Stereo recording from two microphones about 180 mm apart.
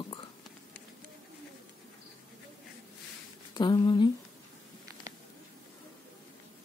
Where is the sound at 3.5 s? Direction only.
25° left (ahead or behind).